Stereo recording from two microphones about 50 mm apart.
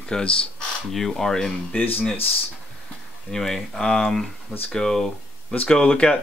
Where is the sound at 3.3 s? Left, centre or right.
Centre.